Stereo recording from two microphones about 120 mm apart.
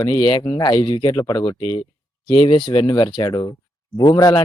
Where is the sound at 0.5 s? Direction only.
40° left (ahead or behind).